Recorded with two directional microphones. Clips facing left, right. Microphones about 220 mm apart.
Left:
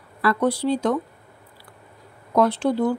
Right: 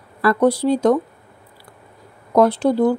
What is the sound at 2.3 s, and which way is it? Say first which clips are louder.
Speech: right 4 dB; 40° right (ahead or behind).